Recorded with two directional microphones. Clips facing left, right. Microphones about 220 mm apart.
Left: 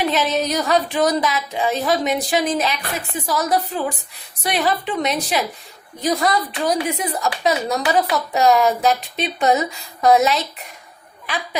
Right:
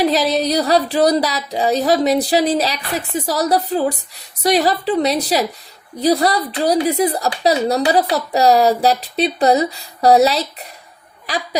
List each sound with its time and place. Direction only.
0.0 s speech: 35° right (ahead or behind)